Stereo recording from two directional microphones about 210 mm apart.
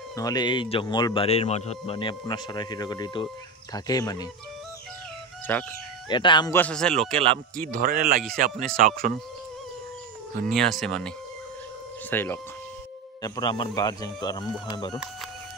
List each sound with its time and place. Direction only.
0.1 s a man's voice: 15° left (ahead or behind)
5.5 s speech: 10° left (ahead or behind)
6.0 s a man's voice: 20° left (ahead or behind)
6.5 s speech: 5° left (ahead or behind)
7.7 s speech: 45° right (ahead or behind)
10.5 s speech: centre (ahead or behind)
13.2 s a man's voice: 20° left (ahead or behind)